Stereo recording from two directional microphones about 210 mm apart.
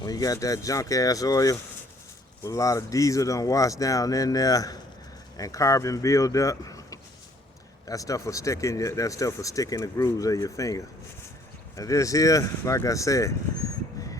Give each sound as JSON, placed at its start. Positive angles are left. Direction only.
{"t": 0.0, "sound": "speech", "side_deg": 15}